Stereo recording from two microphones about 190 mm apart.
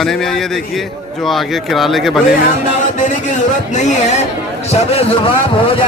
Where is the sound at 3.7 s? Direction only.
40° left (ahead or behind).